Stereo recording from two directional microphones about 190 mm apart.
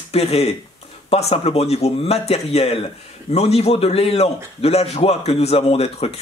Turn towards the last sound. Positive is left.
turn(degrees=30)  # may be behind; listen again after turning